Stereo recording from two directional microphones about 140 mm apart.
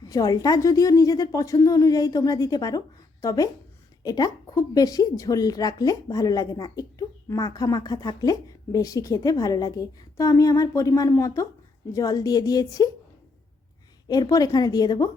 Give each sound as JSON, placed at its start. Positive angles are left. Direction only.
{"t": 0.0, "sound": "a woman's voice", "side_deg": 30}
{"t": 14.1, "sound": "a woman's voice", "side_deg": 30}